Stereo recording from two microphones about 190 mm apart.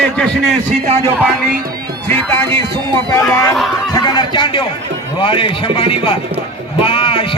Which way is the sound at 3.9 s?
20° left (ahead or behind).